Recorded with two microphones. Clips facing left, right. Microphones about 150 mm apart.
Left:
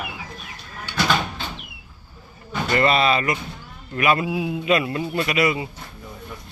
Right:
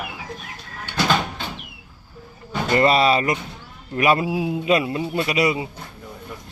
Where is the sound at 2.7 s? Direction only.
35° right (ahead or behind).